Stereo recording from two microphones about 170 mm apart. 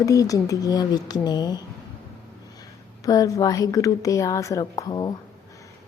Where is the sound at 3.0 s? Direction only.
20° left (ahead or behind).